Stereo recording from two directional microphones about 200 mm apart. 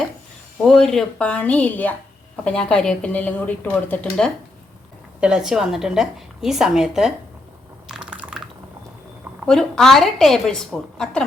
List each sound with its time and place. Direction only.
0.6 s speech: centre (ahead or behind)
7.9 s a sound: 5° right (ahead or behind)
9.5 s speech: 5° left (ahead or behind)